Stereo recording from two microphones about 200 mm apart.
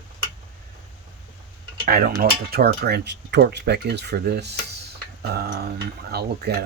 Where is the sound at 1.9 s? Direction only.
50° right (ahead or behind).